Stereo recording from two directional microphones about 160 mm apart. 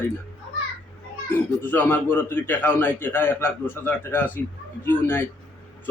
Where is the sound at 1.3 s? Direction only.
10° left (ahead or behind).